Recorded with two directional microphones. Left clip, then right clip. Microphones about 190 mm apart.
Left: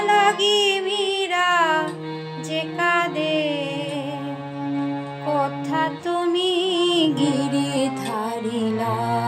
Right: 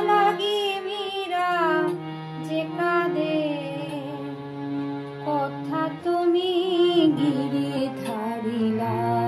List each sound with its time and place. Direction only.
0.0 s music: 25° left (ahead or behind)
5.7 s music: 20° left (ahead or behind)